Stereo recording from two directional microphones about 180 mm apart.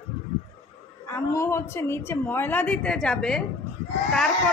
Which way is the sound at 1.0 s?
15° left (ahead or behind).